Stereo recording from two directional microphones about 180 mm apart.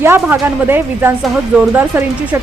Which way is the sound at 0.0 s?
10° right (ahead or behind).